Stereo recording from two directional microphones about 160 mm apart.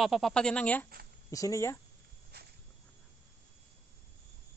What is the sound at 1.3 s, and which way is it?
Speech, 20° left (ahead or behind).